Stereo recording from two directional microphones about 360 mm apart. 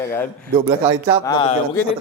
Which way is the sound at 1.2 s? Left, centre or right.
Centre.